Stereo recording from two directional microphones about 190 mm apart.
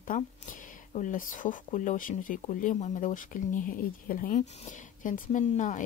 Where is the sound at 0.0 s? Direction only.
45° left (ahead or behind).